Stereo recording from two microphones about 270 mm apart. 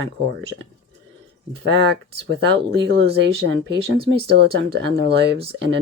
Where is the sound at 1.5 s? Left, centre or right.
Right.